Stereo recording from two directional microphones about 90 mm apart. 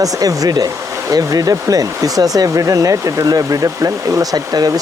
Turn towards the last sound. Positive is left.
turn(degrees=-45)  # may be behind; listen again after turning